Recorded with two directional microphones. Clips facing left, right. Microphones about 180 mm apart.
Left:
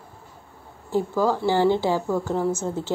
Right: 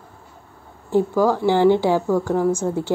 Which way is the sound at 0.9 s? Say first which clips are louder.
Right 4 dB; 15° right (ahead or behind).